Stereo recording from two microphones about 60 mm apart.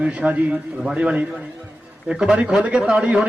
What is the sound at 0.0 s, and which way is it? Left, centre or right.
A man's voice, right.